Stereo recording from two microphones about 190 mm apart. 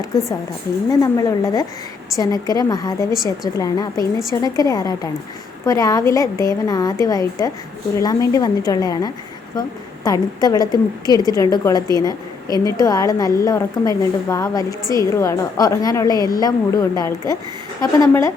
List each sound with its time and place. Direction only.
0.9 s a woman's voice: 20° left (ahead or behind)